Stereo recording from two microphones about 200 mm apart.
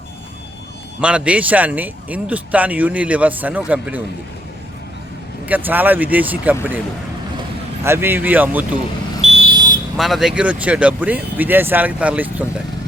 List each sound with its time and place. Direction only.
1.0 s speech: 5° right (ahead or behind)
5.5 s speech: 10° right (ahead or behind)
7.9 s speech: 10° right (ahead or behind)
9.2 s smoke detector: 30° right (ahead or behind)
10.0 s speech: centre (ahead or behind)